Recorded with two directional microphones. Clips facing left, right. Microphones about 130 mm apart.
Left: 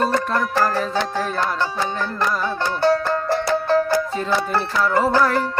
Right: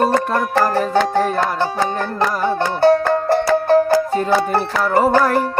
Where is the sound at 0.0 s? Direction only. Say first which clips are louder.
Right 4 dB; 55° right (ahead or behind).